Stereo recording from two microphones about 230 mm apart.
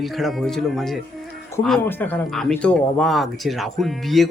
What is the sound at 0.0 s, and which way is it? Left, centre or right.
Speech, centre.